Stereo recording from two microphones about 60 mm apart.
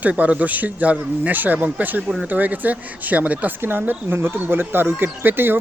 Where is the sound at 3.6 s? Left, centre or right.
Right.